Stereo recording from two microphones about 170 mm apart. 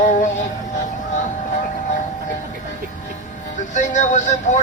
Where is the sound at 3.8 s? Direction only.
45° left (ahead or behind).